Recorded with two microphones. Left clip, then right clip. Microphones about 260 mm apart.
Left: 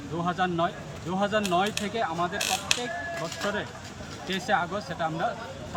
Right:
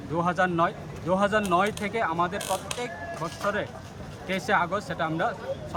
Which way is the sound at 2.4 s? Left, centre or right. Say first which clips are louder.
Left 3 dB; right.